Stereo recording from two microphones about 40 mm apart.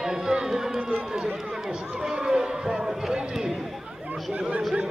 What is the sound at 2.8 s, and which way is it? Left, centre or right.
Run, centre.